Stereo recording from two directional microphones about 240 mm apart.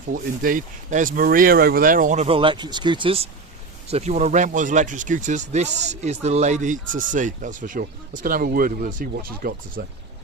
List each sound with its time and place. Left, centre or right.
0.1 s speech: right